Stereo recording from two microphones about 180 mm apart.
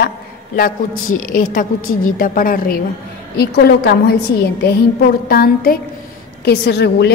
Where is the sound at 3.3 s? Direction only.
60° left (ahead or behind).